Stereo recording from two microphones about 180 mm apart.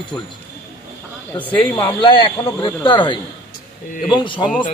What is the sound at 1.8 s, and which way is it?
A man's voice, 30° left (ahead or behind).